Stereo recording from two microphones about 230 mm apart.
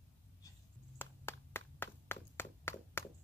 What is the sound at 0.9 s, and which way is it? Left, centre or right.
Clapping, centre.